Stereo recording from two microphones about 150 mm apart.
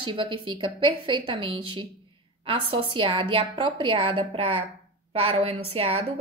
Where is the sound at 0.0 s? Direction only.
35° right (ahead or behind).